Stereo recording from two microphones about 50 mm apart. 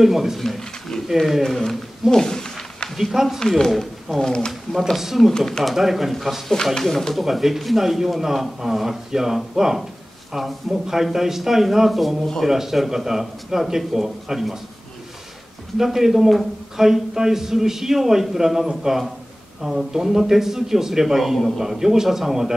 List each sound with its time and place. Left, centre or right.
0.0 s speech: centre
0.4 s speech: centre
1.0 s speech: centre
3.0 s speech: centre
3.3 s speech: centre
4.2 s speech: centre
4.5 s speech: centre
6.5 s speech: centre
15.8 s speech: centre